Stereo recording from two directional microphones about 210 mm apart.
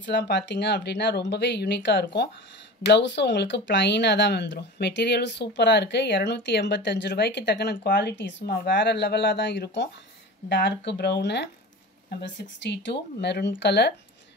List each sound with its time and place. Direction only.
0.0 s speech: 55° left (ahead or behind)